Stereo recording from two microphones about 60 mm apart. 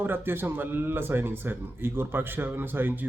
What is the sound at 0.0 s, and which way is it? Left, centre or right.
Speech, right.